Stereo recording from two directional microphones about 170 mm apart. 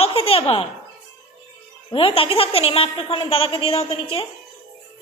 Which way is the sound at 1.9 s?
30° left (ahead or behind).